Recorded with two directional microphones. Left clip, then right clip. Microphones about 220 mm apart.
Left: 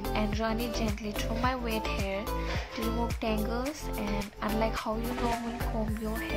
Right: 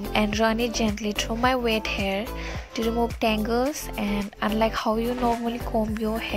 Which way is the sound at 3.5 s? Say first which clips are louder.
Right 9 dB; 35° right (ahead or behind).